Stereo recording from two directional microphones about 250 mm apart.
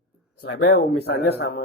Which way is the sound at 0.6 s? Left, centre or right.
Left.